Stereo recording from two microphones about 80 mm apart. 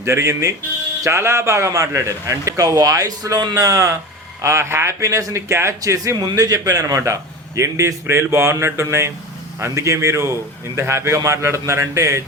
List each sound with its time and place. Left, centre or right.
0.0 s a man's voice: right